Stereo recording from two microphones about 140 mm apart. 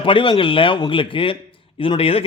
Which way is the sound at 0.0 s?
35° left (ahead or behind).